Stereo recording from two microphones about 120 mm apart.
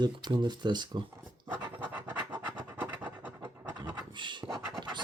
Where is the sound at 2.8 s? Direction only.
15° right (ahead or behind).